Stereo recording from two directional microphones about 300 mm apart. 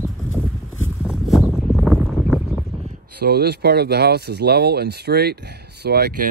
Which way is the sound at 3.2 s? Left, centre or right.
Right.